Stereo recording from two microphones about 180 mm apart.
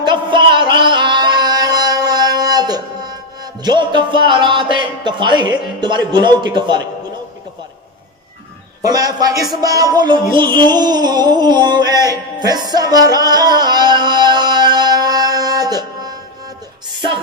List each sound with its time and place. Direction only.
0.0 s music: 25° right (ahead or behind)
8.8 s music: 20° right (ahead or behind)
10.3 s a sound: 25° right (ahead or behind)